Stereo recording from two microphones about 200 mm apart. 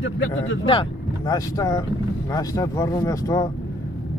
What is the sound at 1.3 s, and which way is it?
Speech, 20° left (ahead or behind).